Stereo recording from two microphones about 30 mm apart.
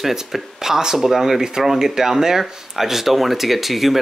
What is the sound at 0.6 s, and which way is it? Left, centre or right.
Speech, centre.